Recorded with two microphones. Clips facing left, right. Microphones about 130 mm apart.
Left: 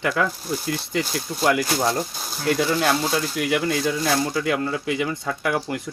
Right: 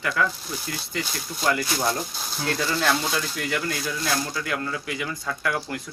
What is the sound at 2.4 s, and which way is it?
Speech, 10° left (ahead or behind).